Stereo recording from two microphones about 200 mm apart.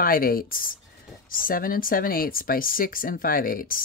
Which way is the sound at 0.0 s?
45° left (ahead or behind).